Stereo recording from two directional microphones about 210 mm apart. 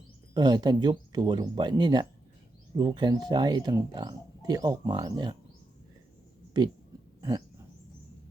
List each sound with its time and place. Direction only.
0.3 s speech: 20° right (ahead or behind)
7.2 s owl: 20° right (ahead or behind)